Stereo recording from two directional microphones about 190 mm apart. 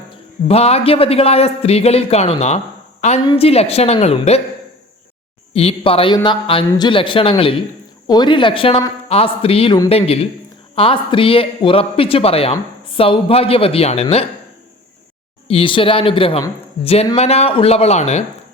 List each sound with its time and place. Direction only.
0.4 s speech: 35° left (ahead or behind)
5.5 s speech: 30° left (ahead or behind)
10.8 s speech: 30° left (ahead or behind)
15.4 s speech: 30° left (ahead or behind)